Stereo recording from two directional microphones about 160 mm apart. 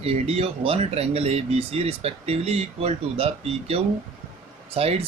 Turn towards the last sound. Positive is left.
turn(degrees=-40)  # may be behind; listen again after turning